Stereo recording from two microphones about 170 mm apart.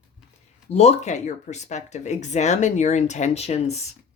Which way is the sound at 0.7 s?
35° left (ahead or behind).